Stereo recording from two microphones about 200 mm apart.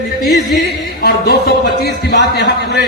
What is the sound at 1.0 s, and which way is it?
Music, 50° left (ahead or behind).